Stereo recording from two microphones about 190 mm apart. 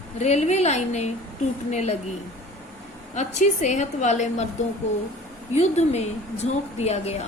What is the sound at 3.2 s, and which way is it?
A woman's voice, 35° left (ahead or behind).